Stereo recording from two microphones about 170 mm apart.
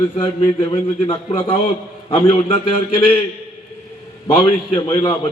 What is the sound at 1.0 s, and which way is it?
A man's voice, 35° left (ahead or behind).